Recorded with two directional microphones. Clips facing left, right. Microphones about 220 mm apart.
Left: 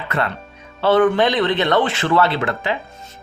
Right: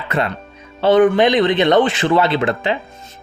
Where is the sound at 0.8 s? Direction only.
15° right (ahead or behind).